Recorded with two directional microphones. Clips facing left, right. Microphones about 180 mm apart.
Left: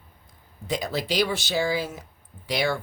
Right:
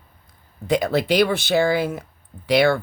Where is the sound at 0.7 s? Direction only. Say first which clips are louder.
Right 8 dB; 60° right (ahead or behind).